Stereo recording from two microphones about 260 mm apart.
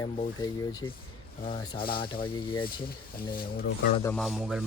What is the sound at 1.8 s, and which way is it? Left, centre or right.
Speech, left.